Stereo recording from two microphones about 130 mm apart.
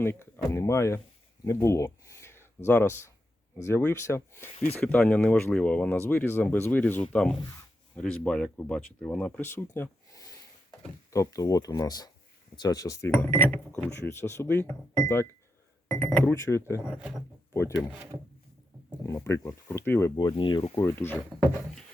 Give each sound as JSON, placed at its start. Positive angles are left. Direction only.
{"t": 0.0, "sound": "speech", "side_deg": 20}
{"t": 1.5, "sound": "a sound", "side_deg": 25}
{"t": 2.6, "sound": "speech", "side_deg": 20}
{"t": 16.8, "sound": "speech", "side_deg": -5}
{"t": 17.5, "sound": "speech", "side_deg": 20}
{"t": 19.0, "sound": "speech", "side_deg": 20}
{"t": 20.3, "sound": "speech", "side_deg": 40}
{"t": 20.7, "sound": "speech", "side_deg": 20}